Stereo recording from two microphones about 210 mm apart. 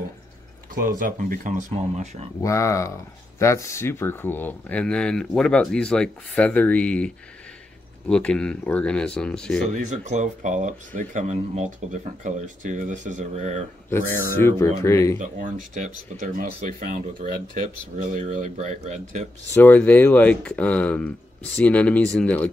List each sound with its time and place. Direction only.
0.8 s speech: 40° right (ahead or behind)
2.4 s speech: 15° left (ahead or behind)
8.1 s speech: 5° left (ahead or behind)
9.8 s speech: 35° right (ahead or behind)
13.8 s speech: 10° left (ahead or behind)
15.1 s speech: 35° right (ahead or behind)
19.5 s speech: 10° left (ahead or behind)